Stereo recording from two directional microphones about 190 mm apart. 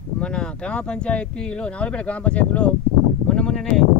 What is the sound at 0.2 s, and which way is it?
Speech, 5° left (ahead or behind).